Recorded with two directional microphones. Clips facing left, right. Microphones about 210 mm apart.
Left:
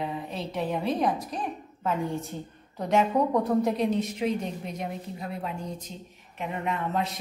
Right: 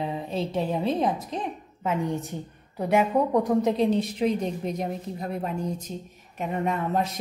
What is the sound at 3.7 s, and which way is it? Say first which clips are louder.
A woman's voice: right 3 dB; 30° right (ahead or behind).